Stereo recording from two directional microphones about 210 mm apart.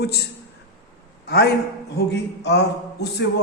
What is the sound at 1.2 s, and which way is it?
A man's voice, 50° left (ahead or behind).